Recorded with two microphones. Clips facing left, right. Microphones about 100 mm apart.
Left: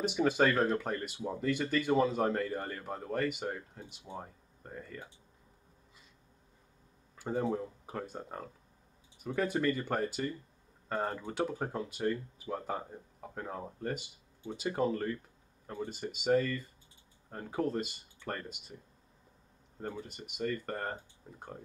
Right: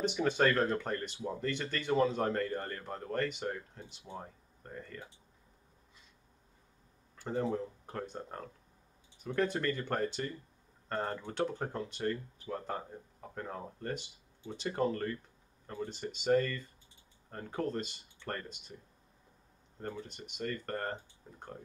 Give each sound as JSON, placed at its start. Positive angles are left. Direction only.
{"t": 0.0, "sound": "speech", "side_deg": 5}
{"t": 7.2, "sound": "a sound", "side_deg": 10}
{"t": 7.5, "sound": "speech", "side_deg": 5}
{"t": 19.8, "sound": "speech", "side_deg": 5}